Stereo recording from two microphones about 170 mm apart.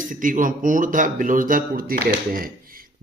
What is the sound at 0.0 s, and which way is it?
Speech, 50° right (ahead or behind).